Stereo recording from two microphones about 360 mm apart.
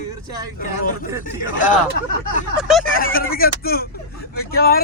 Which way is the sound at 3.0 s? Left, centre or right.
Left.